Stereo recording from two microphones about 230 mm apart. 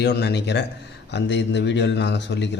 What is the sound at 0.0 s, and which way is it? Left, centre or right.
A man's voice, left.